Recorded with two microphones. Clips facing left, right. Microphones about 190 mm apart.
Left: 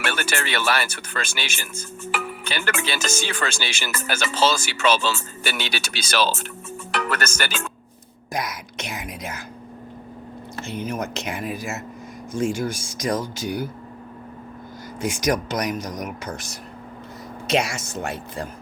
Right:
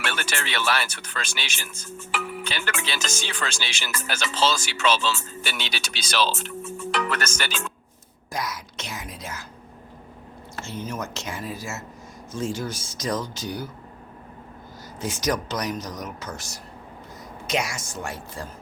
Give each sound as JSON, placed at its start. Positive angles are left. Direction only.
{"t": 0.0, "sound": "speech", "side_deg": 5}
{"t": 8.3, "sound": "whispering", "side_deg": 15}
{"t": 10.6, "sound": "speech", "side_deg": 15}
{"t": 15.0, "sound": "speech", "side_deg": 15}
{"t": 17.6, "sound": "speech", "side_deg": 25}